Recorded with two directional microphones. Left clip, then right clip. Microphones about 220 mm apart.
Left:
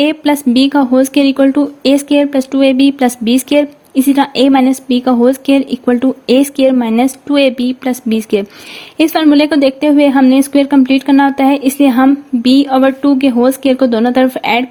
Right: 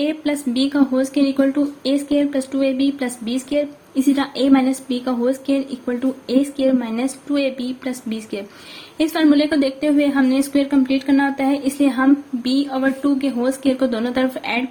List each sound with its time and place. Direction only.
0.0 s a woman's voice: 40° left (ahead or behind)